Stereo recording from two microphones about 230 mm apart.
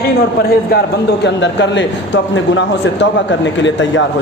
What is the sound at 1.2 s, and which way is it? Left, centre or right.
A man's voice, left.